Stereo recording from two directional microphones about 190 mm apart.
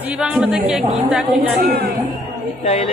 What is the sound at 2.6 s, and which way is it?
Speech, 30° left (ahead or behind).